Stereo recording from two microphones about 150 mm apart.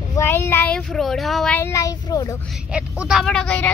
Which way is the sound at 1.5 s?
20° left (ahead or behind).